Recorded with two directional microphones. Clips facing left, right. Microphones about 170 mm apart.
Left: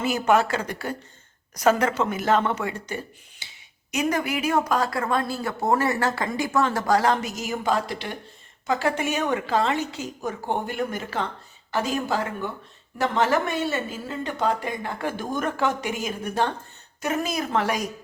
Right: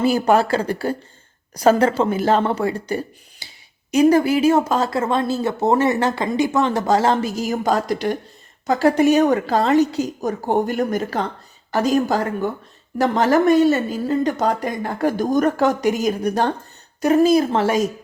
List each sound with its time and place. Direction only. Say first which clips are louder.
0.0 s speech: right 5 dB; 35° right (ahead or behind)
3.4 s a sound: right 3 dB; 35° right (ahead or behind)
3.9 s speech: right 10 dB; 30° right (ahead or behind)